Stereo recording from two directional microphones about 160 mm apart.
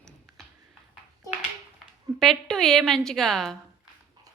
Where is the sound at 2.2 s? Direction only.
5° left (ahead or behind).